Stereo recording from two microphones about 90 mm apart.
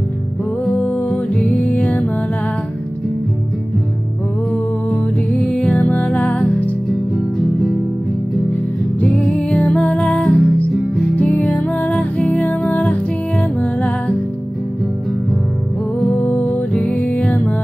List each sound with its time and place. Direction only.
0.7 s music: 15° left (ahead or behind)
4.5 s music: 5° left (ahead or behind)
9.0 s music: 10° left (ahead or behind)
16.1 s music: 15° left (ahead or behind)